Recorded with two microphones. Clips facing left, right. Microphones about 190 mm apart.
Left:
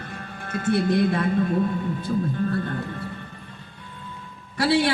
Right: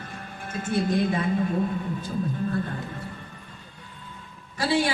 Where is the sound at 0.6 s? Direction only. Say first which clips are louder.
Left 4 dB; 65° left (ahead or behind).